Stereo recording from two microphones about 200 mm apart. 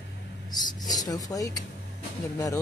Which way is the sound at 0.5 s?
20° left (ahead or behind).